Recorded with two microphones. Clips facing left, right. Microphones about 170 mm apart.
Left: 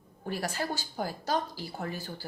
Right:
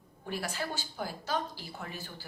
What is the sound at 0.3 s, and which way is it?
Speech, 40° left (ahead or behind).